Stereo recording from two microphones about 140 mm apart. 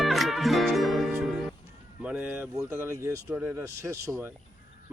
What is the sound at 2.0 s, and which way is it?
Speech, 15° right (ahead or behind).